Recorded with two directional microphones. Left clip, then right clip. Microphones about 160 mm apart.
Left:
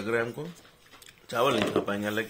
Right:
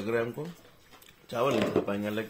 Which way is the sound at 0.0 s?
Centre (ahead or behind).